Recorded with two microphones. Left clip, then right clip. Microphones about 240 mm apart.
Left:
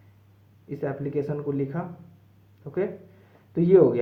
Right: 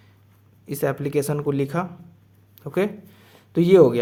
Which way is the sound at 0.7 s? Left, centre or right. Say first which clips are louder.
Right 6 dB; right.